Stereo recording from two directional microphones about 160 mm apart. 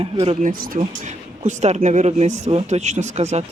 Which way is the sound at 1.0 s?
50° right (ahead or behind).